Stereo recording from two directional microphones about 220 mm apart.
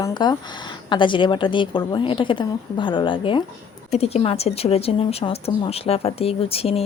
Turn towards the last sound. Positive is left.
turn(degrees=25)  # may be behind; listen again after turning